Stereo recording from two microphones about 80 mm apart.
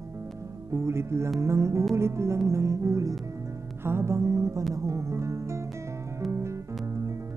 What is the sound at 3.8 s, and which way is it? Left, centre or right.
Music, right.